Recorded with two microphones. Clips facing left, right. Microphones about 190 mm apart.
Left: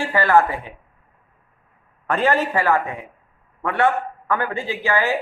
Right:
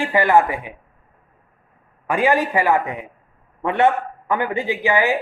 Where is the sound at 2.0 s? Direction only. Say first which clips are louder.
Right 1 dB; 10° right (ahead or behind).